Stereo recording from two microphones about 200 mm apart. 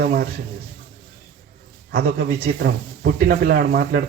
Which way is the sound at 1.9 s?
50° right (ahead or behind).